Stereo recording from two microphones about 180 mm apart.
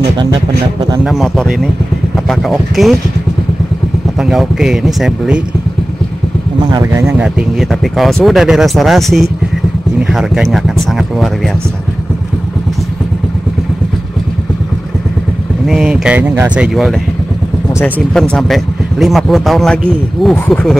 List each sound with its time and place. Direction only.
0.2 s speech: 25° right (ahead or behind)
1.0 s speech: centre (ahead or behind)
4.2 s speech: centre (ahead or behind)
6.7 s speech: 15° right (ahead or behind)
15.6 s speech: centre (ahead or behind)
18.1 s speech: 5° left (ahead or behind)